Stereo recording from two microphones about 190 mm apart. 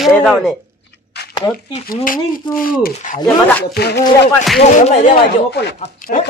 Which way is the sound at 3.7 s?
55° left (ahead or behind).